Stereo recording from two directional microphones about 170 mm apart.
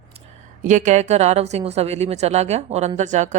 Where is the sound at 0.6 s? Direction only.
45° right (ahead or behind).